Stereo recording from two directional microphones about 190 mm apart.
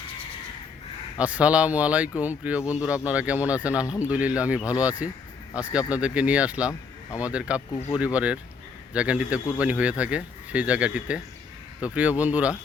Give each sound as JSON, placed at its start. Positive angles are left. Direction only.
{"t": 1.2, "sound": "speech", "side_deg": -5}
{"t": 3.8, "sound": "speech", "side_deg": 15}
{"t": 4.1, "sound": "speech", "side_deg": -10}